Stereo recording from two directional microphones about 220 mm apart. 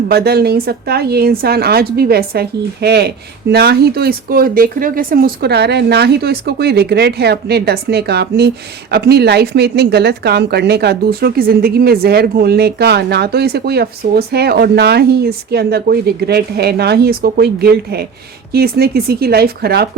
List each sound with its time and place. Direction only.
0.1 s speech: 45° right (ahead or behind)